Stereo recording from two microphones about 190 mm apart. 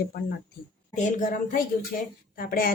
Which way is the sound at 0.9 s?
45° left (ahead or behind).